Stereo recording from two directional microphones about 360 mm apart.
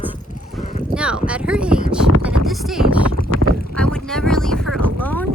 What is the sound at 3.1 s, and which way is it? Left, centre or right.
Boat, left.